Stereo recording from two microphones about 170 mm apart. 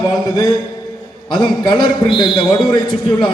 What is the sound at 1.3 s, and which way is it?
A man's voice, 25° left (ahead or behind).